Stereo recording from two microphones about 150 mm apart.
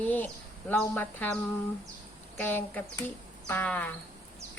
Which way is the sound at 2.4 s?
15° left (ahead or behind).